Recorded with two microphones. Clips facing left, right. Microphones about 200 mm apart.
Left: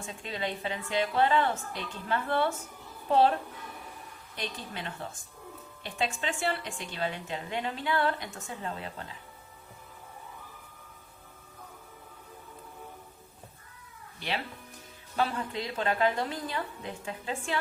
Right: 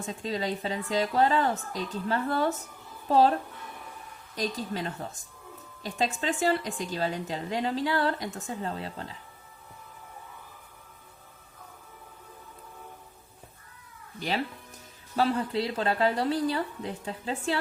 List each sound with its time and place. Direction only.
0.0 s a woman's voice: 40° right (ahead or behind)
4.4 s a woman's voice: 40° right (ahead or behind)
14.2 s a woman's voice: 40° right (ahead or behind)